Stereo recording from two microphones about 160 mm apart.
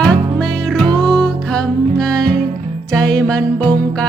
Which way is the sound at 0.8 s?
25° right (ahead or behind).